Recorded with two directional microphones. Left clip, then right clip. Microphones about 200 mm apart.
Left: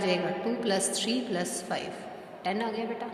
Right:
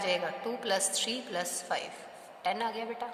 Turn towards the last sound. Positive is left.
turn(degrees=-35)  # may be behind; listen again after turning